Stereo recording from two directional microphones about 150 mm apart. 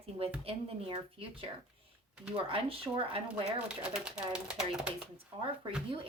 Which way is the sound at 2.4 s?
40° right (ahead or behind).